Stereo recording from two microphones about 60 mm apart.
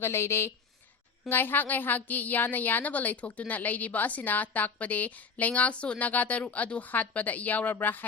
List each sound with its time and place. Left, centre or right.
0.0 s speech: left
1.3 s a woman's voice: left